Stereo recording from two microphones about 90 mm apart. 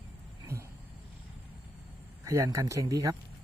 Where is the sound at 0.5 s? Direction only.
30° right (ahead or behind).